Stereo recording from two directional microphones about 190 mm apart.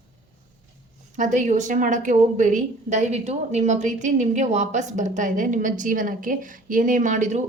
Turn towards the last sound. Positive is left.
turn(degrees=-40)  # may be behind; listen again after turning